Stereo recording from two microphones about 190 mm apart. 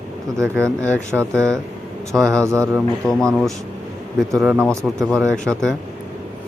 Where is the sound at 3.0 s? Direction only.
5° left (ahead or behind).